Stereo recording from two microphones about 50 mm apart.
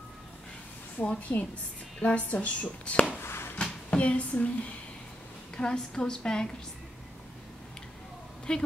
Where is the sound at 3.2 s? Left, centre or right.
Left.